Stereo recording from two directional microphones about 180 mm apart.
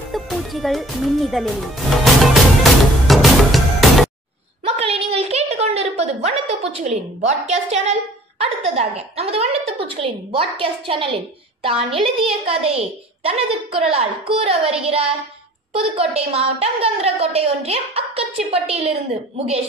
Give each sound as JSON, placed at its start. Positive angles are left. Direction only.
{"t": 0.1, "sound": "music", "side_deg": 0}
{"t": 4.6, "sound": "a sound", "side_deg": -35}
{"t": 7.2, "sound": "a woman's voice", "side_deg": -40}